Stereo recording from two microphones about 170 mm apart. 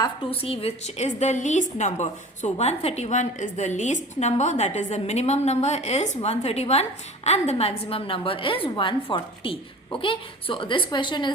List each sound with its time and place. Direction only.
0.0 s a woman's voice: 30° left (ahead or behind)